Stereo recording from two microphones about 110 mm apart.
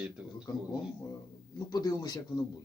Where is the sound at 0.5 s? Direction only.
35° left (ahead or behind).